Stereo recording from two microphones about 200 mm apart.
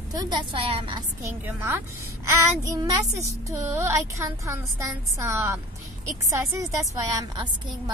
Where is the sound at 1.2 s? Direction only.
10° right (ahead or behind).